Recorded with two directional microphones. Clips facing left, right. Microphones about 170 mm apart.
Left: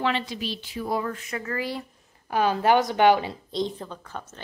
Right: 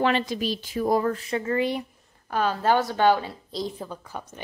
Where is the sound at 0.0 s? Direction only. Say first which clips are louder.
Right 4 dB; 45° right (ahead or behind); by 1.9 s 20° right (ahead or behind).